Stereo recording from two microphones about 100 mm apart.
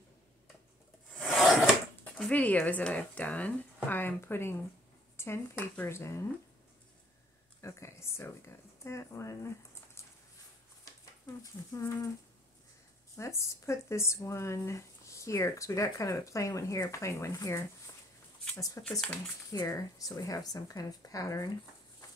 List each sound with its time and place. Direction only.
1.1 s a sound: centre (ahead or behind)
2.1 s speech: 15° left (ahead or behind)
7.6 s speech: 30° left (ahead or behind)
10.0 s a sound: 30° left (ahead or behind)
11.4 s speech: 35° left (ahead or behind)
13.1 s speech: 30° left (ahead or behind)
18.8 s speech: 5° left (ahead or behind)
19.5 s speech: 40° left (ahead or behind)